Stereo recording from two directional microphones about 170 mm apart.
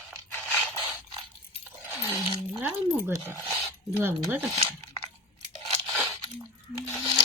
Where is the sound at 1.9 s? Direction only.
15° right (ahead or behind).